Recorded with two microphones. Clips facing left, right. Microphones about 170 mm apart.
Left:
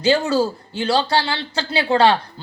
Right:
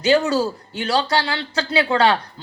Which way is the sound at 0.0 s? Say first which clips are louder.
Even; 30° left (ahead or behind).